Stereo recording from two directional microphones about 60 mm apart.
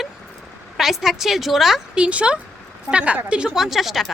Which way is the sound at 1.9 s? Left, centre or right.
Centre.